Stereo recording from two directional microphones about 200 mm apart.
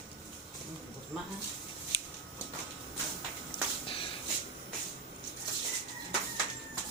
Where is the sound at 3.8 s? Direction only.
25° left (ahead or behind).